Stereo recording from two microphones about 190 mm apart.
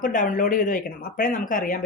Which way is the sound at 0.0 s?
45° left (ahead or behind).